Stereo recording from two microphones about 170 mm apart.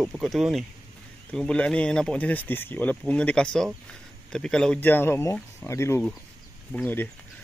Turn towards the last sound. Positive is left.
turn(degrees=10)  # may be behind; listen again after turning